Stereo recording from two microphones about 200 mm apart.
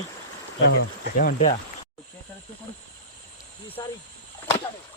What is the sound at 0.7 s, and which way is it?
Speech, 50° left (ahead or behind).